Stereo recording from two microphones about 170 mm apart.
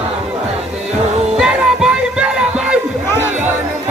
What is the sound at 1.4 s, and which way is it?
Music, 5° right (ahead or behind).